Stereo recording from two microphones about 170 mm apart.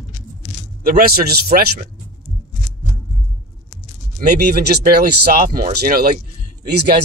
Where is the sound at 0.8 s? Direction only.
60° right (ahead or behind).